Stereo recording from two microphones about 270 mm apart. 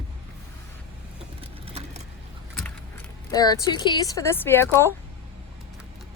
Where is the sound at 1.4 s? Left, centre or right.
Right.